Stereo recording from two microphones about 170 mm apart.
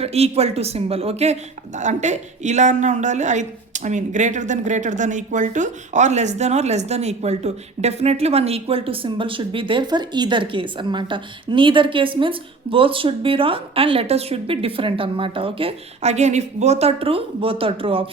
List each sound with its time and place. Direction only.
0.0 s a woman's voice: 35° right (ahead or behind)